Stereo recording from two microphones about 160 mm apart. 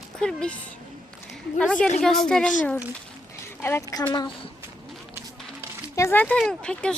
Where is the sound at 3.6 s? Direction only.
20° left (ahead or behind).